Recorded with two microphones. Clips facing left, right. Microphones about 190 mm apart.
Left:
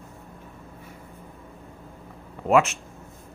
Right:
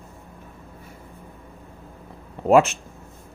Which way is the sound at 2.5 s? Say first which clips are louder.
Right 4 dB; 35° right (ahead or behind).